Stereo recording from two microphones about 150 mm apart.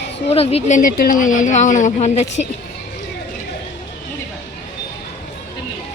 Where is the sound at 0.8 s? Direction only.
60° left (ahead or behind).